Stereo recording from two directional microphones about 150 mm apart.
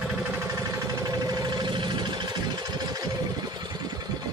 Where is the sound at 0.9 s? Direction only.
25° right (ahead or behind).